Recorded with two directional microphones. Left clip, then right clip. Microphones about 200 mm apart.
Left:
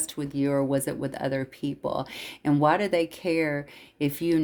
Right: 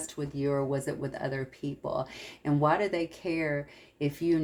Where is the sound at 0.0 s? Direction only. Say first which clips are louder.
Left 4 dB; 60° left (ahead or behind).